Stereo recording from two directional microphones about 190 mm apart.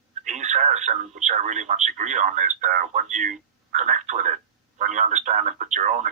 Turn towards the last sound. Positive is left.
turn(degrees=-40)  # may be behind; listen again after turning